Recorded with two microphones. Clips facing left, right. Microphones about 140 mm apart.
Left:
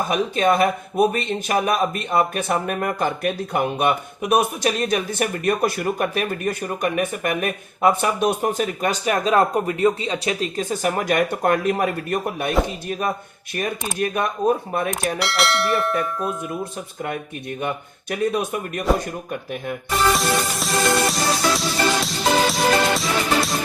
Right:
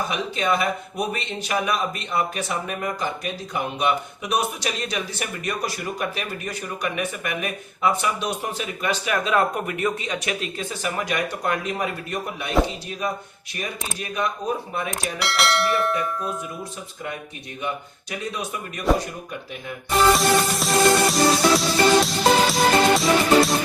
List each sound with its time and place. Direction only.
0.0 s speech: 50° left (ahead or behind); by 10.5 s 30° left (ahead or behind)
10.6 s speech: 45° left (ahead or behind)
15.2 s music: centre (ahead or behind)
17.6 s speech: 55° left (ahead or behind)
20.1 s music: centre (ahead or behind)